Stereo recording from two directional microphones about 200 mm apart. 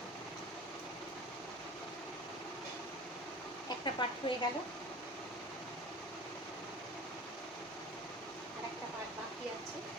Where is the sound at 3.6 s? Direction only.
20° left (ahead or behind).